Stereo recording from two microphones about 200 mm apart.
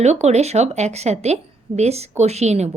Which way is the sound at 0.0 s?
35° right (ahead or behind).